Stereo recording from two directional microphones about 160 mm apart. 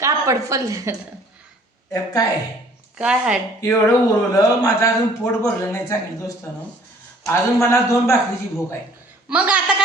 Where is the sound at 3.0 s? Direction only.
5° right (ahead or behind).